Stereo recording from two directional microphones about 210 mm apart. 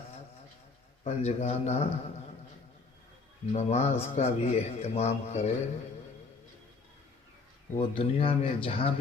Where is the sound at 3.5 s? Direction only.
30° left (ahead or behind).